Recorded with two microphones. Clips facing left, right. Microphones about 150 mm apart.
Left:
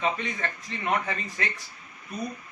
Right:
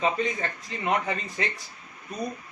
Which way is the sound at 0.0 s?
35° right (ahead or behind).